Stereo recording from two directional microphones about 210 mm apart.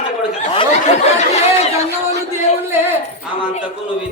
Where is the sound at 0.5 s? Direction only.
30° left (ahead or behind).